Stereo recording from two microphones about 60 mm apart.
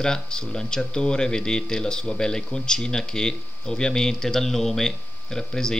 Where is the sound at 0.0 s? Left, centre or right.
Centre.